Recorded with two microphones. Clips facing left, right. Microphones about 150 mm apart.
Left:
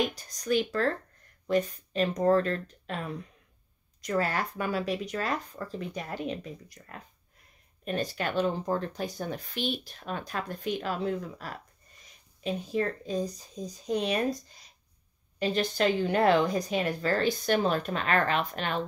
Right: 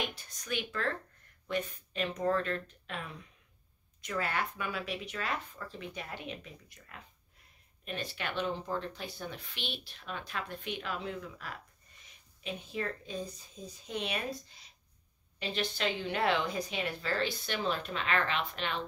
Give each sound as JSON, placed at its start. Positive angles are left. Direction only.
{"t": 0.0, "sound": "speech", "side_deg": 40}